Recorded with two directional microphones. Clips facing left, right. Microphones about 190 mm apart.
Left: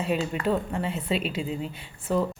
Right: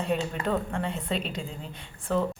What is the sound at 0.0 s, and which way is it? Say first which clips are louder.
A woman's voice: left 2 dB; 5° left (ahead or behind).